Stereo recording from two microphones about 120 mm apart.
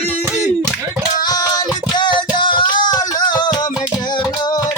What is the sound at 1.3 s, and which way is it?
Music, 35° left (ahead or behind).